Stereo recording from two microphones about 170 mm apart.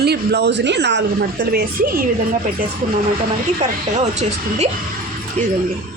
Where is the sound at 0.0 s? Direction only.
75° right (ahead or behind).